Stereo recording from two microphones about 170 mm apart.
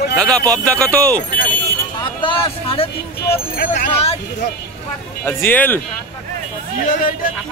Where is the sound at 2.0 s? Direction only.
30° left (ahead or behind).